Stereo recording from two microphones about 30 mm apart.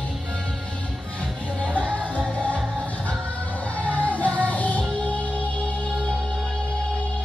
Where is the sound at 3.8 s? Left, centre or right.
Left.